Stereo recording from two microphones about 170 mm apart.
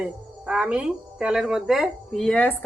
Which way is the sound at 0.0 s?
5° right (ahead or behind).